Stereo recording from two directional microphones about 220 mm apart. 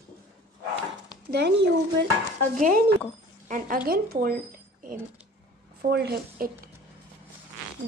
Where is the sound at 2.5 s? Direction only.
35° right (ahead or behind).